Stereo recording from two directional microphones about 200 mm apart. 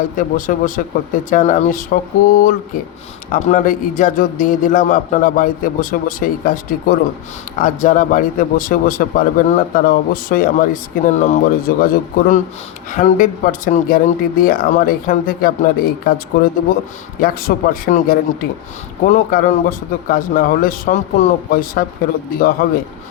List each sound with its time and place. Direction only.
0.2 s speech: 40° left (ahead or behind)